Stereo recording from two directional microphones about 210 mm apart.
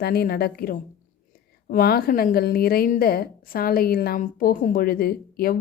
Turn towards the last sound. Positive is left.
turn(degrees=45)  # may be behind; listen again after turning